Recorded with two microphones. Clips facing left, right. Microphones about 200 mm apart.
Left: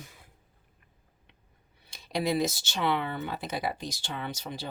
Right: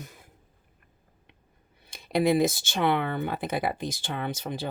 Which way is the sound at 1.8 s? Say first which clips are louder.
Right 6 dB; 55° right (ahead or behind).